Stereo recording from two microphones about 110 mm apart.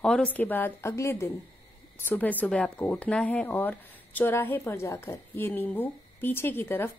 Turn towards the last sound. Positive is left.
turn(degrees=20)  # may be behind; listen again after turning